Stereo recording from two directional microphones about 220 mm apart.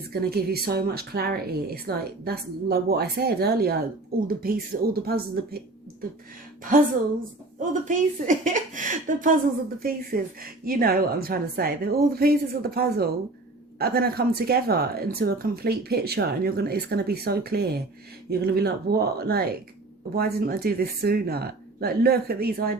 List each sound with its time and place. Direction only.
0.1 s speech: 45° right (ahead or behind)
7.6 s a woman's voice: 35° right (ahead or behind)